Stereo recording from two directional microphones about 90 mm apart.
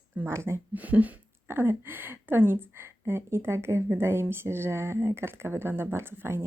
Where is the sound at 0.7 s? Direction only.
15° right (ahead or behind).